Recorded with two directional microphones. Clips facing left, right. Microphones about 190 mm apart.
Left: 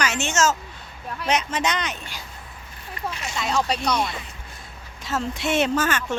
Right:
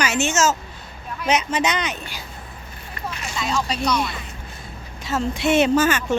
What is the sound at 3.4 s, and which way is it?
Speech, 60° left (ahead or behind).